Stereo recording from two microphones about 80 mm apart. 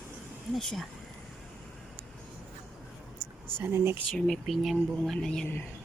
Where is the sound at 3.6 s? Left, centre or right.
Right.